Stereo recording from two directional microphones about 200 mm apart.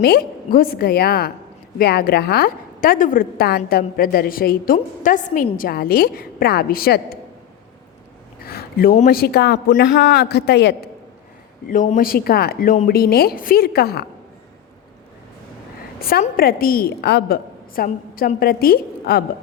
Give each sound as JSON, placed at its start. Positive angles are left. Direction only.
{"t": 0.0, "sound": "a woman's voice", "side_deg": 50}
{"t": 8.4, "sound": "a sound", "side_deg": 50}
{"t": 9.0, "sound": "a man's voice", "side_deg": 50}
{"t": 11.7, "sound": "a woman's voice", "side_deg": 40}
{"t": 12.9, "sound": "a woman's voice", "side_deg": 50}
{"t": 16.0, "sound": "a woman's voice", "side_deg": 50}